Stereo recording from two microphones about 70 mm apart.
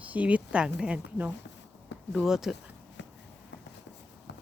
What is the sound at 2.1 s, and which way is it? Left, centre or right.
Speech, centre.